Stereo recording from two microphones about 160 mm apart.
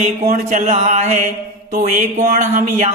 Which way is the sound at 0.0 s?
50° right (ahead or behind).